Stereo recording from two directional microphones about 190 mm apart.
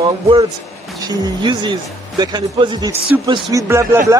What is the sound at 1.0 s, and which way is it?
Speech, 25° right (ahead or behind).